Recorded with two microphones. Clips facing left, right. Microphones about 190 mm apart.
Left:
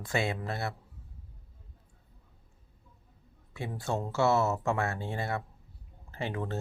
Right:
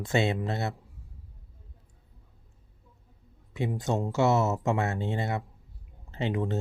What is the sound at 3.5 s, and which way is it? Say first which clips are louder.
Speech: right 5 dB; 20° right (ahead or behind).